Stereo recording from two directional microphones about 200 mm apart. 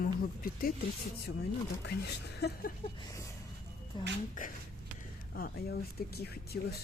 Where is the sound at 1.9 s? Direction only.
55° left (ahead or behind).